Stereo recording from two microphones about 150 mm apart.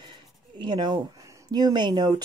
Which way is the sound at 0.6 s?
30° right (ahead or behind).